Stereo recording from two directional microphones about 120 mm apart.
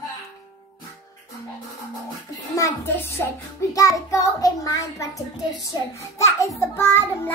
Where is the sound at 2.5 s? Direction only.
20° left (ahead or behind).